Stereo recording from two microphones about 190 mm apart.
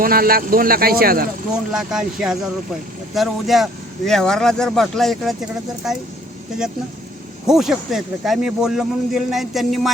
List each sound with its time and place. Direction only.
0.0 s speech: 50° right (ahead or behind)
1.7 s a man's voice: 5° right (ahead or behind)
7.4 s a man's voice: centre (ahead or behind)